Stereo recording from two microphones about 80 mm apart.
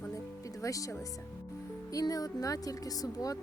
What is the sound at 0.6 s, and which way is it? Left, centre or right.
A woman's voice, left.